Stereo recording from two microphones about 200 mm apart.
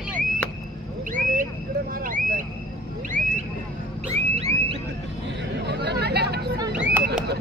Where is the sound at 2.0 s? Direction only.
40° right (ahead or behind).